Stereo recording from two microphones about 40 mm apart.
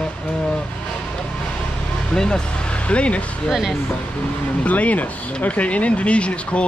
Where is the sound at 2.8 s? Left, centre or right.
Left.